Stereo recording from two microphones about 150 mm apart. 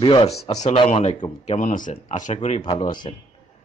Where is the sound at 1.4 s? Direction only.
55° left (ahead or behind).